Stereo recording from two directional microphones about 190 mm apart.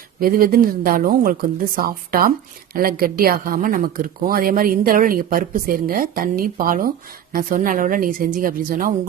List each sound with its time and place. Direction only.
0.2 s a woman's voice: 50° right (ahead or behind)